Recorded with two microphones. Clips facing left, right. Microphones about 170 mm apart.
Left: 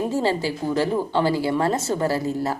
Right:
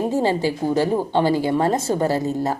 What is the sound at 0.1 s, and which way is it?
A woman's voice, 15° right (ahead or behind).